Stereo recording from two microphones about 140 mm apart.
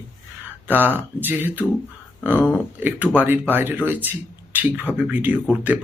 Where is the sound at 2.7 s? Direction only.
15° right (ahead or behind).